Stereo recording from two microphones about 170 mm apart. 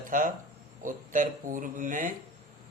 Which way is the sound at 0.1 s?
50° right (ahead or behind).